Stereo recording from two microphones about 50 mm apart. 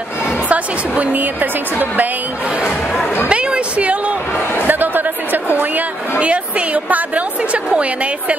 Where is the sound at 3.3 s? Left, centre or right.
Right.